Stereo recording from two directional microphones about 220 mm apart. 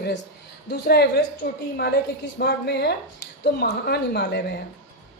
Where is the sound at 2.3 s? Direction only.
50° left (ahead or behind).